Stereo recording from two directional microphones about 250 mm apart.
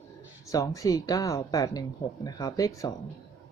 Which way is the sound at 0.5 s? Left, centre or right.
Centre.